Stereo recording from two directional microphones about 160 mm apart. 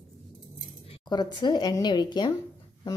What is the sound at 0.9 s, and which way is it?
A woman's voice, 25° left (ahead or behind).